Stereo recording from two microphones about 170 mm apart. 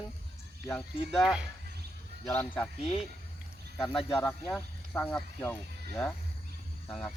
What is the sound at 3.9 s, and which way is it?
Speech, 25° left (ahead or behind).